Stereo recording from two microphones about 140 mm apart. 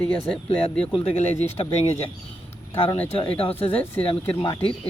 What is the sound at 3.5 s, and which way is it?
Speech, 15° left (ahead or behind).